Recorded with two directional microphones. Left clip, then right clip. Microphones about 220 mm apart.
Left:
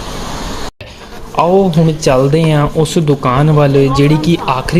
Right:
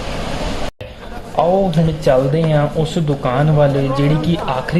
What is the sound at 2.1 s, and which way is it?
Speech, 30° left (ahead or behind).